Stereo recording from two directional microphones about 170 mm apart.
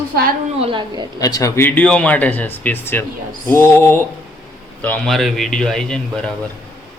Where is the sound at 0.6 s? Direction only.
30° right (ahead or behind).